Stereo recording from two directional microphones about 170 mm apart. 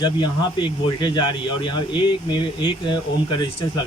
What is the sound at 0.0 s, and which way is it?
Speech, 25° left (ahead or behind).